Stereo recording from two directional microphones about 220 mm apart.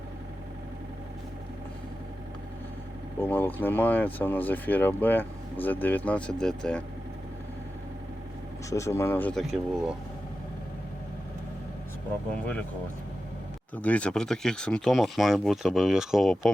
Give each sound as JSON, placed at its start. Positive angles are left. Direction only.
{"t": 3.2, "sound": "speech", "side_deg": 10}
{"t": 8.7, "sound": "speech", "side_deg": 15}
{"t": 13.7, "sound": "speech", "side_deg": 5}